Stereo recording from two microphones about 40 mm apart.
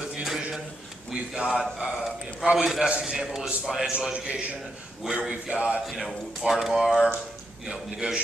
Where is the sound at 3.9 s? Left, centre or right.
Right.